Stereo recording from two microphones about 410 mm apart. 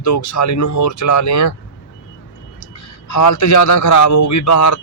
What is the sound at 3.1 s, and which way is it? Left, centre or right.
A man's voice, left.